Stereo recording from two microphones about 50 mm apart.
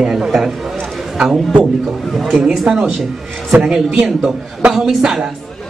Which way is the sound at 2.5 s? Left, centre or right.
Centre.